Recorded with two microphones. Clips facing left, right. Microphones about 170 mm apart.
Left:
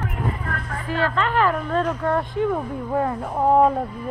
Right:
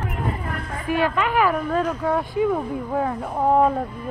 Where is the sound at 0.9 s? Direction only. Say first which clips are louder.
Right 2 dB; 15° right (ahead or behind).